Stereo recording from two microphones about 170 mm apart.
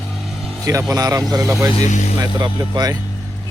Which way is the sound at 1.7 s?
45° left (ahead or behind).